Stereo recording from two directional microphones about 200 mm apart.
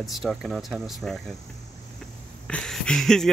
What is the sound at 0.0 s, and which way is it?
Speech, centre (ahead or behind).